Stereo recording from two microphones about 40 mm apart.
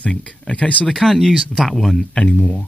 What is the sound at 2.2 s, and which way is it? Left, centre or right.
Speech, left.